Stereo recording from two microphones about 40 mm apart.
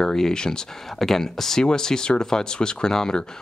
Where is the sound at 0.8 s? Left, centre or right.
Centre.